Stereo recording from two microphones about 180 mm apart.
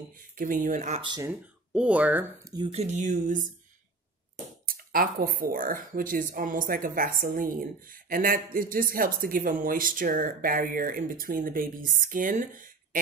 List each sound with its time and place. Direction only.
0.1 s speech: 50° right (ahead or behind)
1.0 s speech: 25° right (ahead or behind)
1.7 s speech: 5° right (ahead or behind)
2.5 s speech: 30° right (ahead or behind)
4.6 s speech: 55° right (ahead or behind)